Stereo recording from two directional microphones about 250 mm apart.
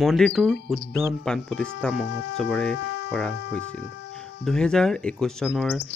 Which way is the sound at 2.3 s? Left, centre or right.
Centre.